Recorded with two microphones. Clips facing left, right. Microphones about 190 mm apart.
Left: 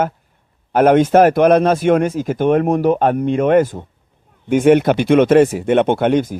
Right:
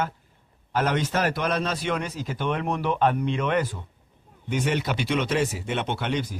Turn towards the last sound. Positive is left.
turn(degrees=50)  # may be behind; listen again after turning